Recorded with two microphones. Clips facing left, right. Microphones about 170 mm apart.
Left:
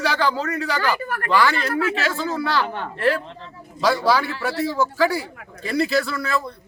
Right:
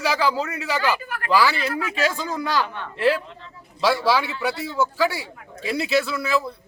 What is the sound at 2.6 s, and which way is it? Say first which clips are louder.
Speech: left 5 dB; 50° left (ahead or behind).